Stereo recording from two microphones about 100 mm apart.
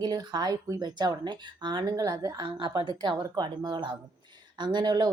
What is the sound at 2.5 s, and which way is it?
Speech, 50° right (ahead or behind).